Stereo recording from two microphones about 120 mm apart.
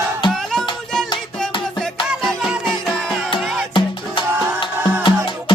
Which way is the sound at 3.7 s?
45° left (ahead or behind).